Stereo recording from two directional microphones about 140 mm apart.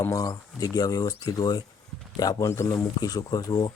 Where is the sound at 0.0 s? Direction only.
25° left (ahead or behind).